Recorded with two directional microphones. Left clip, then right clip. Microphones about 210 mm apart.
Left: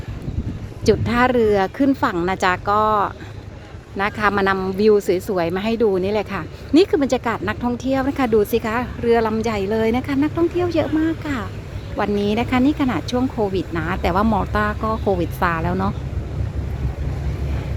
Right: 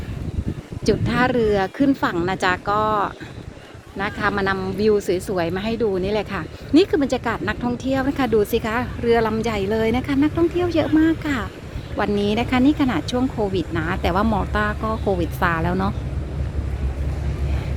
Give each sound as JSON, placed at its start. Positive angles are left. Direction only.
{"t": 0.9, "sound": "a woman's voice", "side_deg": 5}